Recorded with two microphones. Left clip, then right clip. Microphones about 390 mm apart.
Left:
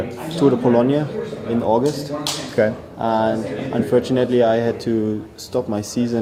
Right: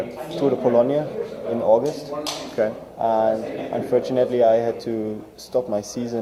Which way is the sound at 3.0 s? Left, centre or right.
Centre.